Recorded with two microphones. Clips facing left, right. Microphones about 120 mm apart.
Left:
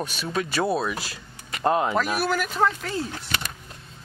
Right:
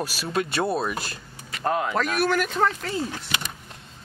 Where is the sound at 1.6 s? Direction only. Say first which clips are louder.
Left 3 dB; 25° left (ahead or behind).